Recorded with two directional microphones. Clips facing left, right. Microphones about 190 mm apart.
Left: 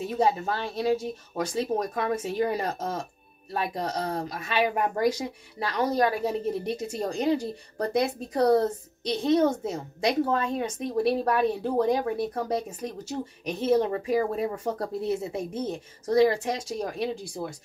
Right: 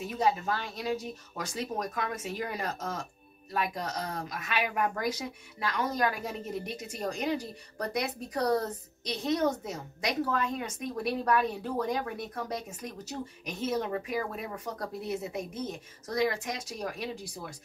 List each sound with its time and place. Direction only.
0.1 s speech: 30° left (ahead or behind)